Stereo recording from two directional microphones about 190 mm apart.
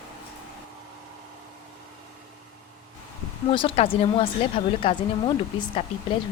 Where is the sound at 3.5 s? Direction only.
30° left (ahead or behind).